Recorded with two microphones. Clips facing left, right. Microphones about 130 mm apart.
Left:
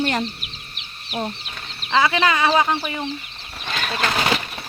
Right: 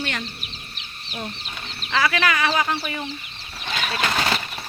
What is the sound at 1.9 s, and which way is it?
Speech, 25° left (ahead or behind).